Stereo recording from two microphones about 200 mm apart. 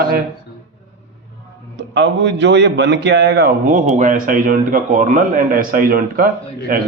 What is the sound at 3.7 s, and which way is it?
A man's voice, 40° right (ahead or behind).